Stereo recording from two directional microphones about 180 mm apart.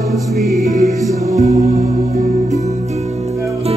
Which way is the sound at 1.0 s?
20° right (ahead or behind).